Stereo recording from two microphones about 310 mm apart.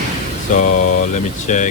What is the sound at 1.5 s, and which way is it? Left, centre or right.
Speech, left.